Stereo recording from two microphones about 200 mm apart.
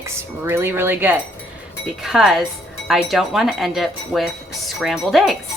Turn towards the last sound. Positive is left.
turn(degrees=0)  # may be behind; listen again after turning